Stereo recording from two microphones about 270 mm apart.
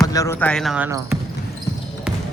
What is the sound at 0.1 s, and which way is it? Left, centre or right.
Speech, centre.